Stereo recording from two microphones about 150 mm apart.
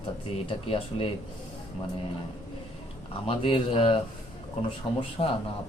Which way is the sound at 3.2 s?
40° left (ahead or behind).